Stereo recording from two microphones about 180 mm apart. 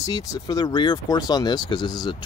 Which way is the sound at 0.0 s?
20° left (ahead or behind).